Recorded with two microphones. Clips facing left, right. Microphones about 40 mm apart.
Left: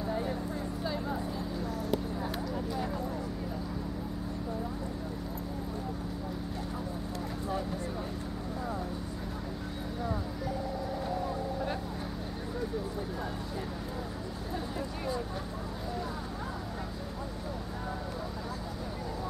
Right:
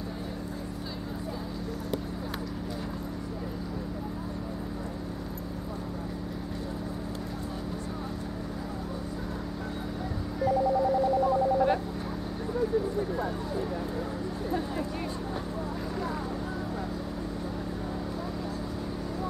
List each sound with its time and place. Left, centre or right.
11.5 s vehicle: right